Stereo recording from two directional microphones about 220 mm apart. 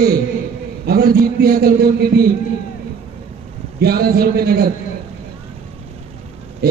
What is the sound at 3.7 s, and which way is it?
Speech, 45° right (ahead or behind).